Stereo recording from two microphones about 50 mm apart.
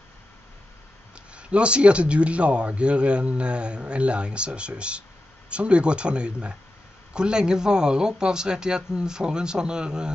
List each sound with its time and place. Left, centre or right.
1.1 s speech: right